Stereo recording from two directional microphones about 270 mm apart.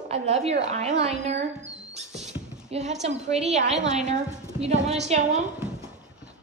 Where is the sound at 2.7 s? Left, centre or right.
Right.